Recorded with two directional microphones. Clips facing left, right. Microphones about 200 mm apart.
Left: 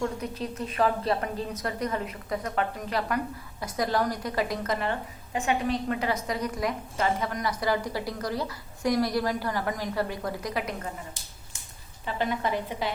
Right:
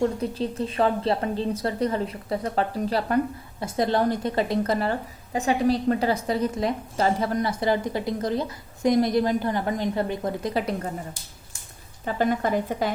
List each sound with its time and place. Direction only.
0.0 s a woman's voice: 30° right (ahead or behind)
12.0 s a woman's voice: 45° right (ahead or behind)